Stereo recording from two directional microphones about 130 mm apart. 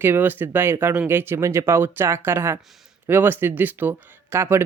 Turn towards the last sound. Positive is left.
turn(degrees=-20)  # may be behind; listen again after turning